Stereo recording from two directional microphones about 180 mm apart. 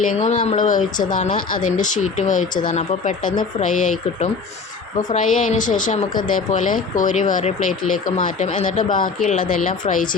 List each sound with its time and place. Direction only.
0.2 s speech: 40° left (ahead or behind)